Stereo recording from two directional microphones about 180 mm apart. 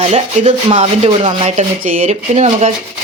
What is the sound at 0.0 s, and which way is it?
Speech, 35° right (ahead or behind).